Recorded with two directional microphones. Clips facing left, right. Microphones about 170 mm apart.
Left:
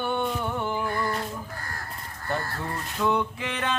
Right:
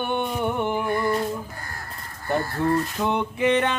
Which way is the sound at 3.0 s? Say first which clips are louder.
Even; 20° right (ahead or behind).